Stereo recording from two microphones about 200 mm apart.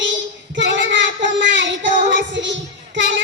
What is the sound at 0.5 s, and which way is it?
Child singing, 65° right (ahead or behind).